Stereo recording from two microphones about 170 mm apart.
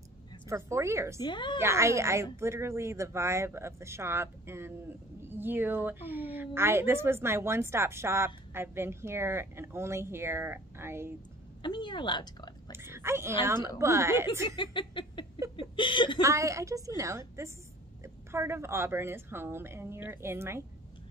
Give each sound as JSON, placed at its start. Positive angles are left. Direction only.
{"t": 0.5, "sound": "a woman's voice", "side_deg": -15}
{"t": 1.2, "sound": "speech", "side_deg": 25}
{"t": 1.6, "sound": "a woman's voice", "side_deg": -15}
{"t": 11.6, "sound": "a woman's voice", "side_deg": 25}
{"t": 12.7, "sound": "a woman's voice", "side_deg": -15}
{"t": 14.6, "sound": "a sound", "side_deg": 30}
{"t": 15.7, "sound": "speech", "side_deg": 30}
{"t": 16.2, "sound": "a woman's voice", "side_deg": -20}